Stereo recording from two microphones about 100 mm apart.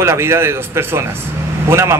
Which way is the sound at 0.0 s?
25° right (ahead or behind).